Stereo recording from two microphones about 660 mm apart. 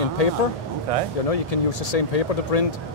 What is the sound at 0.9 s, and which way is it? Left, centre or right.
Speech, right.